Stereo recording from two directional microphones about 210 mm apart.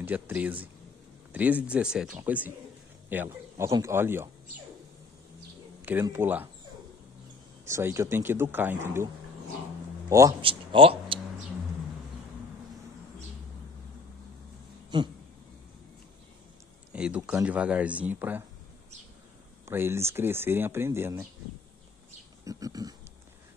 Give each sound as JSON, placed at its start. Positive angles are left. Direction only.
{"t": 0.0, "sound": "speech", "side_deg": -10}
{"t": 5.9, "sound": "speech", "side_deg": -10}
{"t": 7.6, "sound": "a man's voice", "side_deg": -15}
{"t": 14.9, "sound": "speech", "side_deg": -20}
{"t": 16.9, "sound": "speech", "side_deg": -5}
{"t": 19.6, "sound": "speech", "side_deg": -10}
{"t": 22.4, "sound": "speech", "side_deg": -15}